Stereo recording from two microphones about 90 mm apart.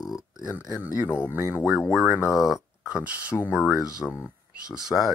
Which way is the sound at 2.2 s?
35° left (ahead or behind).